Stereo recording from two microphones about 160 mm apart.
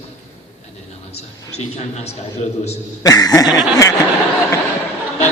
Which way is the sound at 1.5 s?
40° left (ahead or behind).